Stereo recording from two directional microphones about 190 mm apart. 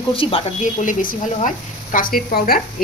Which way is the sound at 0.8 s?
40° left (ahead or behind).